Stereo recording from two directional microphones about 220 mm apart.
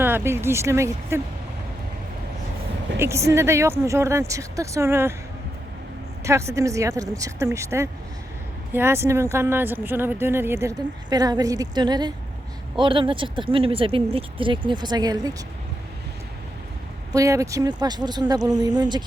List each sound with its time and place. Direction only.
0.0 s speech: 10° right (ahead or behind)
3.0 s speech: 15° right (ahead or behind)
6.2 s speech: 15° right (ahead or behind)
17.1 s speech: 15° right (ahead or behind)